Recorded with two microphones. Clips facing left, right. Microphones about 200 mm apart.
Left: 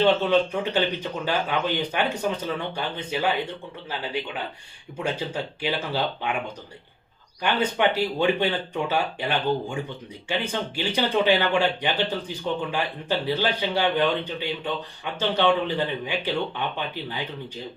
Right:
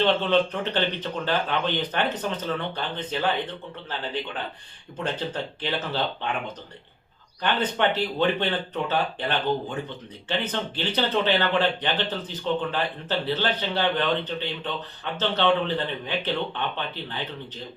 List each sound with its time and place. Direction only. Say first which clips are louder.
0.0 s speech: left 2 dB; 10° left (ahead or behind)
7.4 s speech: left 1 dB; 10° left (ahead or behind)